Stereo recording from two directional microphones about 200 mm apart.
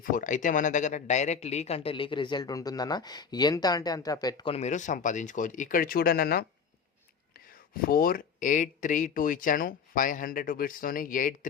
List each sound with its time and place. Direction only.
0.0 s speech: 40° left (ahead or behind)